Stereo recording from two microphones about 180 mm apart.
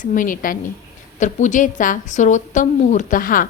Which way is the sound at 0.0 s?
45° left (ahead or behind).